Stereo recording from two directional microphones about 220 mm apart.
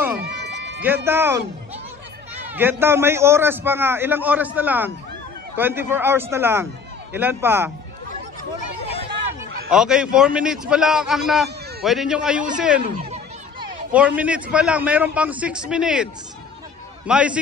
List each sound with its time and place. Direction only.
0.2 s a sound: 50° right (ahead or behind)
0.8 s a man's voice: 10° right (ahead or behind)
2.4 s a man's voice: 10° right (ahead or behind)
9.7 s a man's voice: 5° right (ahead or behind)
13.9 s a man's voice: 5° right (ahead or behind)